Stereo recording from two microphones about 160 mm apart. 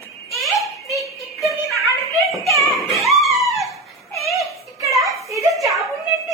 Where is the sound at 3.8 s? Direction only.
Centre (ahead or behind).